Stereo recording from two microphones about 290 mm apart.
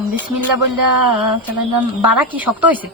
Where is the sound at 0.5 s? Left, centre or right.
Right.